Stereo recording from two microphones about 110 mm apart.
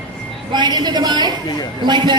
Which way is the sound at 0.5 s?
40° right (ahead or behind).